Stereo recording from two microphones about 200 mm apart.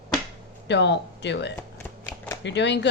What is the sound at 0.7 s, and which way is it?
Speech, 60° left (ahead or behind).